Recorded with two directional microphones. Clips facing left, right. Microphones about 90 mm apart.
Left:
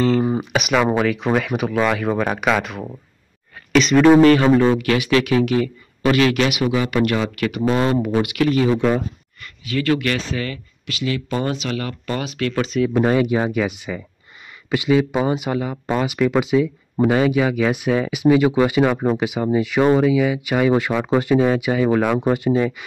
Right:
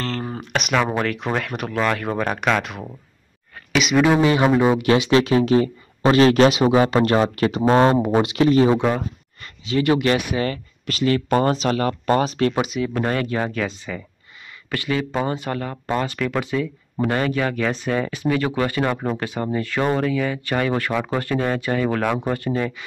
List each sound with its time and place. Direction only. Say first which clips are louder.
0.0 s speech: left 10 dB; 10° left (ahead or behind); by 4.8 s 15° right (ahead or behind)
4.8 s speech: right 1 dB; 25° right (ahead or behind)
7.9 s speech: right 1 dB; 30° right (ahead or behind)
10.4 s speech: right 4 dB; 40° right (ahead or behind)
12.9 s speech: left 7 dB; 10° left (ahead or behind)